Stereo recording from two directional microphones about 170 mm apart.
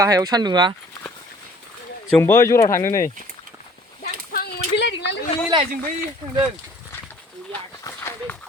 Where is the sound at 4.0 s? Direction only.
65° left (ahead or behind); by 5.2 s 90° left.